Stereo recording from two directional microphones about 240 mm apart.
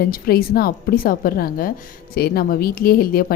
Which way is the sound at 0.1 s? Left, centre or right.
Left.